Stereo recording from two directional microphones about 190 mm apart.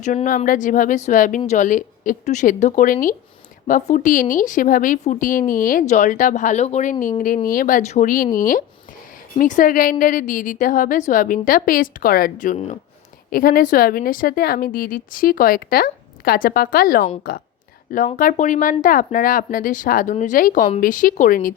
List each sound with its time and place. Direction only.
0.0 s a woman's voice: 40° left (ahead or behind)
7.4 s a woman's voice: 45° left (ahead or behind)
13.3 s a woman's voice: 50° left (ahead or behind)